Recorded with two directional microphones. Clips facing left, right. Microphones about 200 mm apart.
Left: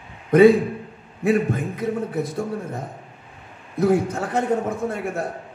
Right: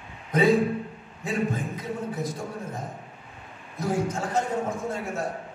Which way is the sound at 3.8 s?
60° left (ahead or behind).